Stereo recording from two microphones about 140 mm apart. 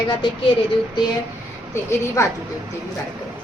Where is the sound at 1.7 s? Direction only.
20° left (ahead or behind).